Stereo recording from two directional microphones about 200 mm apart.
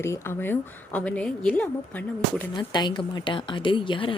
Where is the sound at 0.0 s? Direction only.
10° left (ahead or behind).